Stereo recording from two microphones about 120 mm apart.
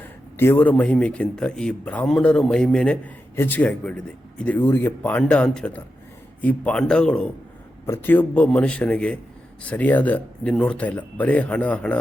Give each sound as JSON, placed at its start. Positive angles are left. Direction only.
{"t": 0.0, "sound": "a man's voice", "side_deg": 20}